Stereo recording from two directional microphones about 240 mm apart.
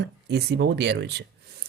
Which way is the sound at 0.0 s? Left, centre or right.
Right.